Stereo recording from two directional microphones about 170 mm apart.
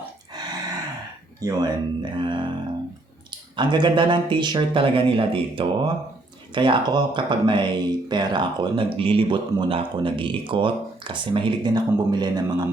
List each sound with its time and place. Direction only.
1.4 s speech: 20° right (ahead or behind)
3.5 s speech: 30° right (ahead or behind)